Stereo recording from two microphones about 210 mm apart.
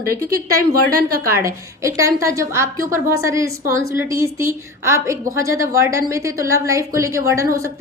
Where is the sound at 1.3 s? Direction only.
15° right (ahead or behind).